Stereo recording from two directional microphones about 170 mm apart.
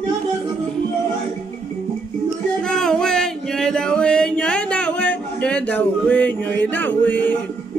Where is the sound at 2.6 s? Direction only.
5° left (ahead or behind).